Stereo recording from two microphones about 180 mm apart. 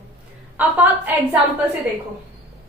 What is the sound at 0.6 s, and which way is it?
Speech, 10° right (ahead or behind).